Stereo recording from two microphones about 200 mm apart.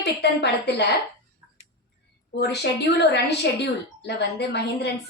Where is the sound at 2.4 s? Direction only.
55° left (ahead or behind).